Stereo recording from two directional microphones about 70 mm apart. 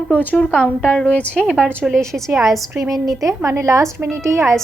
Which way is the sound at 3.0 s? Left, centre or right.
Right.